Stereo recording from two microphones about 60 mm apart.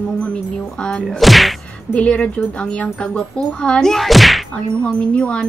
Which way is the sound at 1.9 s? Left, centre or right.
Left.